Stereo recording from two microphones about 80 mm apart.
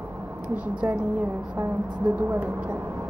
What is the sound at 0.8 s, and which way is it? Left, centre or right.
Speech, centre.